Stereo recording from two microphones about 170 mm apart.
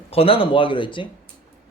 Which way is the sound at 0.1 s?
35° left (ahead or behind).